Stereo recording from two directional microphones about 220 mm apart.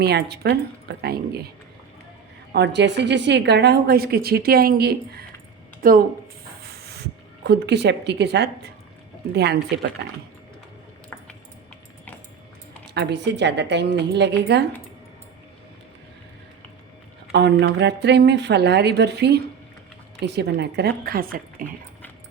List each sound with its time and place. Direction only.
0.0 s a woman's voice: 45° right (ahead or behind)
2.5 s a woman's voice: 50° right (ahead or behind)
11.1 s a sound: 10° left (ahead or behind)
12.9 s a woman's voice: 50° right (ahead or behind)
17.3 s a woman's voice: 50° right (ahead or behind)